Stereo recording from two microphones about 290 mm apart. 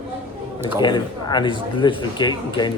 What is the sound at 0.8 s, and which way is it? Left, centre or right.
Speech, centre.